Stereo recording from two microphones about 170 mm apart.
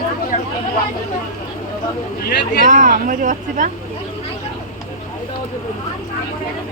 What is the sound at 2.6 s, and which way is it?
Speech, 50° right (ahead or behind).